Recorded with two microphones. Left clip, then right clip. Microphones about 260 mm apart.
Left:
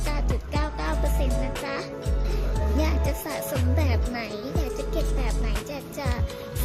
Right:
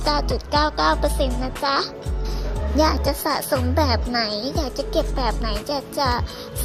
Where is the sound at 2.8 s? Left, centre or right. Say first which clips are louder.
Right 11 dB; centre.